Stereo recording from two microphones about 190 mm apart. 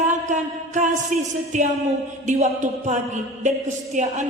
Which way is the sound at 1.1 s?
45° right (ahead or behind).